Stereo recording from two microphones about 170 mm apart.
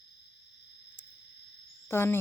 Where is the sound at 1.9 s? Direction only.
15° left (ahead or behind).